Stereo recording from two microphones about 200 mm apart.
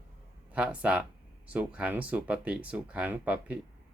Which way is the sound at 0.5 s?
5° right (ahead or behind).